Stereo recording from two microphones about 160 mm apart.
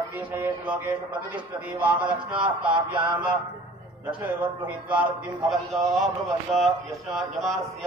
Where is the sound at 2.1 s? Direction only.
30° right (ahead or behind).